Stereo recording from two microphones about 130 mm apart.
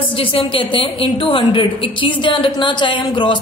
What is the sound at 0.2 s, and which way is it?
A woman's voice, 40° left (ahead or behind).